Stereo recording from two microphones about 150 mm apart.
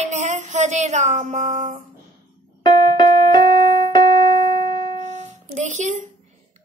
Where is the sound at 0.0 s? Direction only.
50° right (ahead or behind).